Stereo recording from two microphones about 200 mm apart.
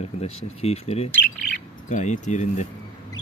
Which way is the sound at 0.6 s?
30° left (ahead or behind).